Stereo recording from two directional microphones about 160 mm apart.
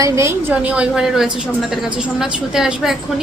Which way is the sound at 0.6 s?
5° right (ahead or behind).